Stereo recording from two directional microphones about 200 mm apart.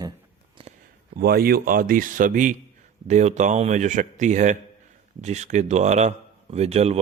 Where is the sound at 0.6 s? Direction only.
25° right (ahead or behind).